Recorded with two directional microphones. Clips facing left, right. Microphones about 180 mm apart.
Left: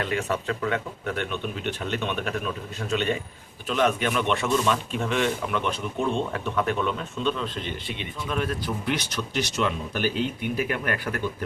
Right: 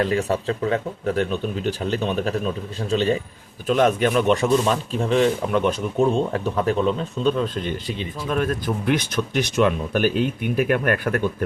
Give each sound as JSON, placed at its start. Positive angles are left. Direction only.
{"t": 0.0, "sound": "speech", "side_deg": -35}
{"t": 3.7, "sound": "speech", "side_deg": -45}
{"t": 8.3, "sound": "speech", "side_deg": -50}